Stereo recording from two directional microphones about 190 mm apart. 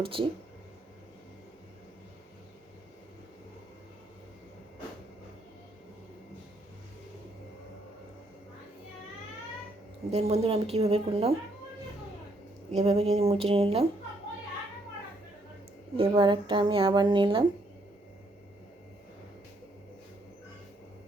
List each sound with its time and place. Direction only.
0.0 s speech: 30° right (ahead or behind)
10.1 s a woman's voice: 35° right (ahead or behind)
12.7 s a woman's voice: 35° right (ahead or behind)
16.0 s speech: 30° right (ahead or behind)